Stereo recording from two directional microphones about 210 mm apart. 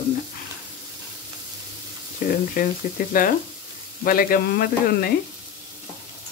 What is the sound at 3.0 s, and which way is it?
Speech, 40° left (ahead or behind).